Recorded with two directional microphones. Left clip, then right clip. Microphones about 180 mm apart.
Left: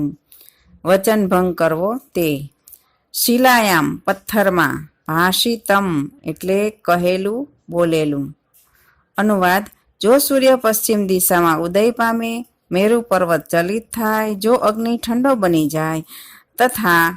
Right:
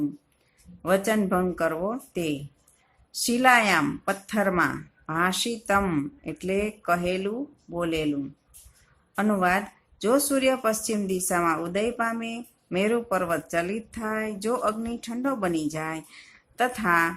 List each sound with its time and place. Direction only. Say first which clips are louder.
0.8 s speech: left 9 dB; 40° left (ahead or behind)